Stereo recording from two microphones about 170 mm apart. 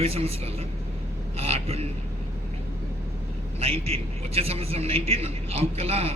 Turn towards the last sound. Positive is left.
turn(degrees=-35)  # may be behind; listen again after turning